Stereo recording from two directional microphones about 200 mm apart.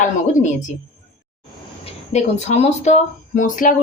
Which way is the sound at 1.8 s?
35° left (ahead or behind).